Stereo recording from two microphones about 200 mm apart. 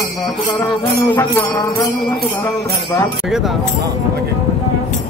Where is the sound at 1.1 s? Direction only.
10° left (ahead or behind).